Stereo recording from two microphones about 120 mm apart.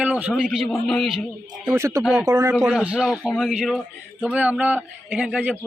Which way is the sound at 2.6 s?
Centre (ahead or behind).